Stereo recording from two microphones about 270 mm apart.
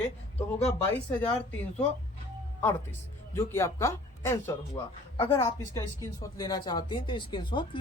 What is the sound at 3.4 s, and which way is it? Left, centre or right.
Speech, centre.